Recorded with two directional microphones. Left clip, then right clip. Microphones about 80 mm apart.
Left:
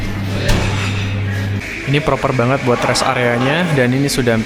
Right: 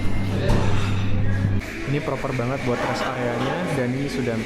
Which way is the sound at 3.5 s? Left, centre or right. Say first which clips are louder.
Left 9 dB; left.